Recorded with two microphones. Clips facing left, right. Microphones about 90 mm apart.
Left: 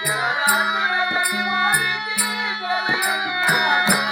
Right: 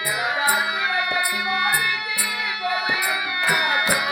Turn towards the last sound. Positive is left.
turn(degrees=25)  # may be behind; listen again after turning